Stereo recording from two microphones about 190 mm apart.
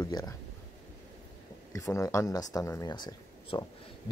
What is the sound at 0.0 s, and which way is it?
Speech, 20° left (ahead or behind).